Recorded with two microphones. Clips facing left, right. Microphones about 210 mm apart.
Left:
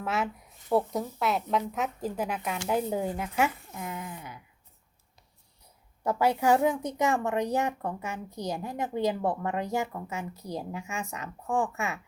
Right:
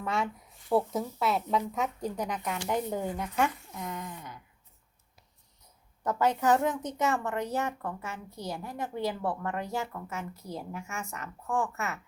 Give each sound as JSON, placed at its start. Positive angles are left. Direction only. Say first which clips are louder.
{"t": 0.0, "sound": "a woman's voice", "louder": "left 1 dB", "side_deg": 5}
{"t": 6.0, "sound": "a woman's voice", "louder": "left 2 dB", "side_deg": 10}